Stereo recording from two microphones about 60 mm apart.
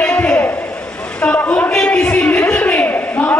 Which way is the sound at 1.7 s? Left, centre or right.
Centre.